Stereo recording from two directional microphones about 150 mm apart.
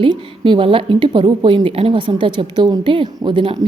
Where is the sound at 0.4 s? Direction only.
35° right (ahead or behind).